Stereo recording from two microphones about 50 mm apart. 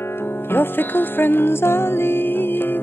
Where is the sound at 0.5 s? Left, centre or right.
Left.